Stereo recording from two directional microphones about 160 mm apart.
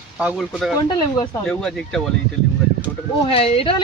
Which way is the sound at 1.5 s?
5° left (ahead or behind).